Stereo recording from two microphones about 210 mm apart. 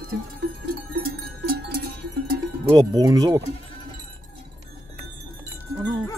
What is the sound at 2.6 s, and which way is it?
Speech, 15° right (ahead or behind).